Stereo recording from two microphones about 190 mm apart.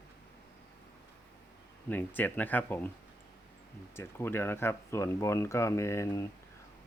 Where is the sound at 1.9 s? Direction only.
10° left (ahead or behind).